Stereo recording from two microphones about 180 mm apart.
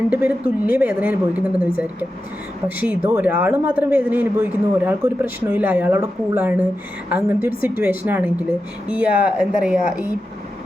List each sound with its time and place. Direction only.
0.1 s a man's voice: 5° right (ahead or behind)